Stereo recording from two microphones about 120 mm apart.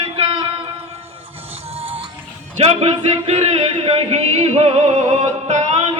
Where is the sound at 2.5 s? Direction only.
65° right (ahead or behind).